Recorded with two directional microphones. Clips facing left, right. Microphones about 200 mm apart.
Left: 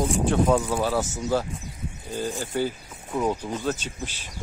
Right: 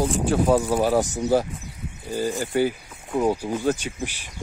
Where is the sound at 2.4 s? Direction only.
10° right (ahead or behind).